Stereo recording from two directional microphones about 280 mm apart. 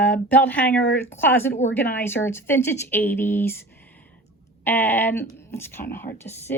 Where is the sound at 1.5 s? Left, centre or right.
Left.